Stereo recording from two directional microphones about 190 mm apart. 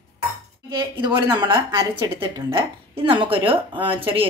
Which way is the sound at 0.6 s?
25° right (ahead or behind).